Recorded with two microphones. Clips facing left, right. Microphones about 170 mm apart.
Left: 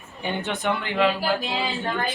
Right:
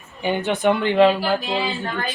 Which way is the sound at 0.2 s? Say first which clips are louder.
Right 6 dB; 15° right (ahead or behind).